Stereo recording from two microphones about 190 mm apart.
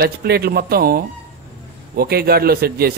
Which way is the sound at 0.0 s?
55° right (ahead or behind).